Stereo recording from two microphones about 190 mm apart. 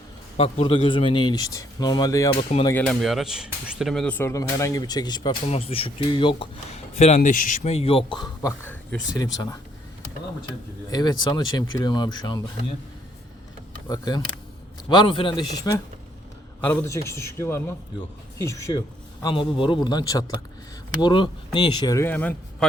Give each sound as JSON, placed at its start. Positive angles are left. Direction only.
{"t": 0.3, "sound": "speech", "side_deg": 30}
{"t": 2.3, "sound": "speech", "side_deg": 30}
{"t": 2.6, "sound": "a man's voice", "side_deg": 10}
{"t": 9.2, "sound": "speech", "side_deg": 20}
{"t": 10.9, "sound": "speech", "side_deg": 20}
{"t": 13.8, "sound": "speech", "side_deg": 20}
{"t": 19.2, "sound": "speech", "side_deg": 25}